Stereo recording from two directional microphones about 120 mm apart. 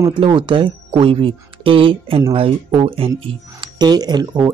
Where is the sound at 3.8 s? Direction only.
35° right (ahead or behind).